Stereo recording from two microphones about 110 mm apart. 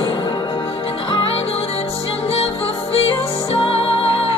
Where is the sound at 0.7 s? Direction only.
55° left (ahead or behind).